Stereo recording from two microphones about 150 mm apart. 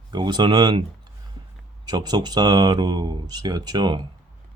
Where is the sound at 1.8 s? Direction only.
30° right (ahead or behind).